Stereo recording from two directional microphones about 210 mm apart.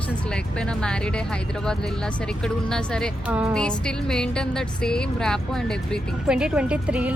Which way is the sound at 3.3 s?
5° right (ahead or behind).